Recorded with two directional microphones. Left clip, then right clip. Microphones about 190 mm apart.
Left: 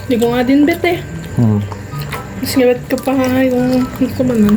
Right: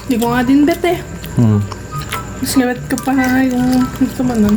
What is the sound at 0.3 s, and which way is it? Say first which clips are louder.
Speech: right 1 dB; 40° right (ahead or behind).